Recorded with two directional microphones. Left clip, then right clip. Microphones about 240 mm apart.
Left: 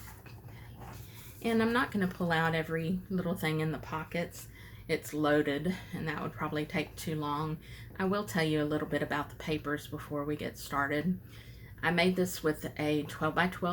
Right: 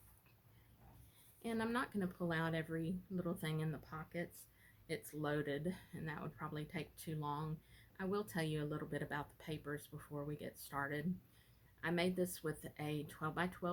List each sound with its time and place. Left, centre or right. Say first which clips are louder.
1.4 s speech: left 11 dB; right